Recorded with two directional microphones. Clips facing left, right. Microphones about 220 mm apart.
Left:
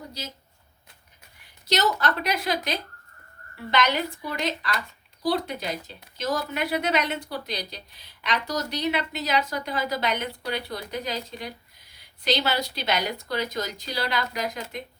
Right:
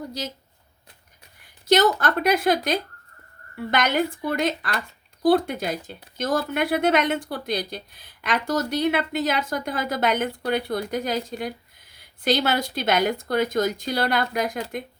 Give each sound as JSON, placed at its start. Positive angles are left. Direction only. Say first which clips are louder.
{"t": 1.6, "sound": "speech", "louder": "right 6 dB", "side_deg": -50}